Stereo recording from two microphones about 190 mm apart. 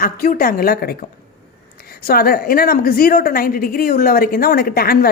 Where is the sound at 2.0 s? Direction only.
50° left (ahead or behind).